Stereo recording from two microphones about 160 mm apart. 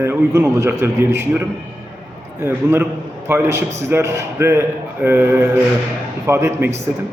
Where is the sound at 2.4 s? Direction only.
15° right (ahead or behind).